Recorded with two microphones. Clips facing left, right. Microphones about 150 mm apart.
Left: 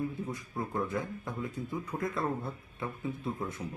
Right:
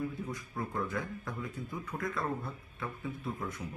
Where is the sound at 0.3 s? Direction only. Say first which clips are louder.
Left 2 dB; 25° left (ahead or behind).